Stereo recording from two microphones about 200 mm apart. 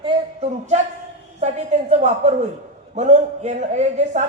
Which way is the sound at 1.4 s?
35° right (ahead or behind).